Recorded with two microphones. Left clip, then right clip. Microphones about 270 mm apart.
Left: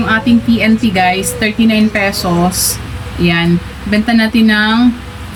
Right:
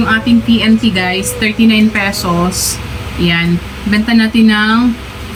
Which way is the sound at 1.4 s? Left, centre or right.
Centre.